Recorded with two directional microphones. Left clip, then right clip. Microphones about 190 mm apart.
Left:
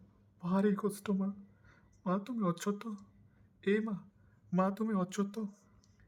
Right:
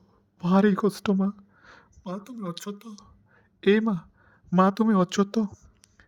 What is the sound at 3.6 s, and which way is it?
Speech, 40° right (ahead or behind).